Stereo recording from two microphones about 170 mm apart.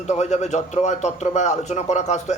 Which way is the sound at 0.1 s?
40° left (ahead or behind).